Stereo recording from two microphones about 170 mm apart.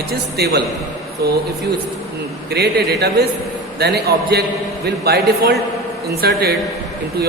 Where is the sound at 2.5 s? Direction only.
70° right (ahead or behind).